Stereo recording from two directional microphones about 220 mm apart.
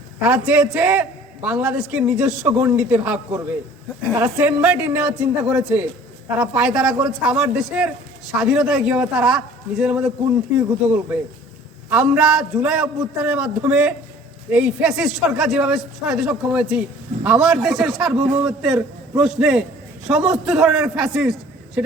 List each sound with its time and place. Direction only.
0.2 s a man's voice: 5° right (ahead or behind)